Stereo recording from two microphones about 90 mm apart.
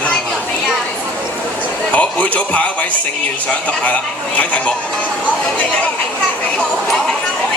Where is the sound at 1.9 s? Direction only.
15° left (ahead or behind).